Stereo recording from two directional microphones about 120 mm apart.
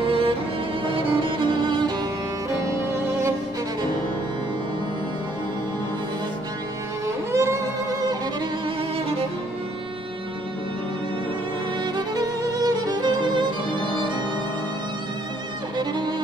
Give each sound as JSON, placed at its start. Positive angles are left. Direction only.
{"t": 0.0, "sound": "music", "side_deg": -50}
{"t": 2.9, "sound": "music", "side_deg": -20}
{"t": 7.3, "sound": "music", "side_deg": -25}
{"t": 11.8, "sound": "music", "side_deg": -30}
{"t": 15.8, "sound": "music", "side_deg": -40}